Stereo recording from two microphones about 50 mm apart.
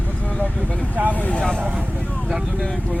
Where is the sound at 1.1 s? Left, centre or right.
Left.